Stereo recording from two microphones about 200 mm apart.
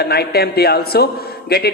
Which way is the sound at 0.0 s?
50° left (ahead or behind).